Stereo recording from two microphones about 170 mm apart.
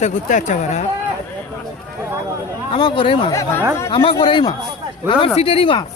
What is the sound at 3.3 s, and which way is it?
Speech, 20° left (ahead or behind).